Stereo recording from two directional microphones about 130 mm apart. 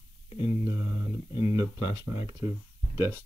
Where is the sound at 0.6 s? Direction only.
20° right (ahead or behind).